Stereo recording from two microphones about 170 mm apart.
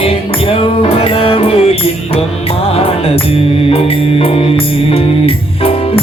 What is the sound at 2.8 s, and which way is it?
Music, 35° left (ahead or behind).